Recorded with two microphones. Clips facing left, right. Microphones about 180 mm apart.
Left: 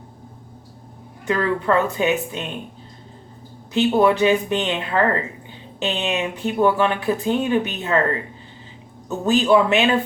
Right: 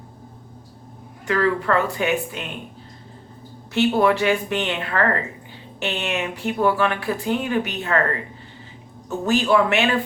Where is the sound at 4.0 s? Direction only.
20° left (ahead or behind).